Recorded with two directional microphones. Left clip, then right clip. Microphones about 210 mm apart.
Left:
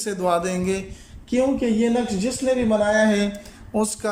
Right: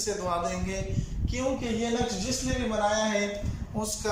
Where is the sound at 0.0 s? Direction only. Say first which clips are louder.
Left 7 dB; 55° left (ahead or behind).